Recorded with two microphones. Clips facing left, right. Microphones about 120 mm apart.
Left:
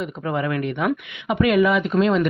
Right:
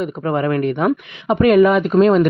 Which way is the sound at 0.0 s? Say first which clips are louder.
Right 5 dB; 45° right (ahead or behind).